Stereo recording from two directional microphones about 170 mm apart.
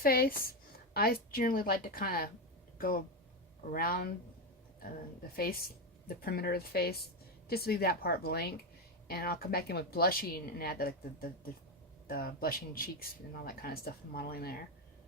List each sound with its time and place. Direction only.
0.0 s speech: 60° left (ahead or behind)
6.2 s a woman's voice: 60° left (ahead or behind)